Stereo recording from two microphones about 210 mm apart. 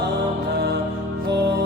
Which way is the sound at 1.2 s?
50° right (ahead or behind).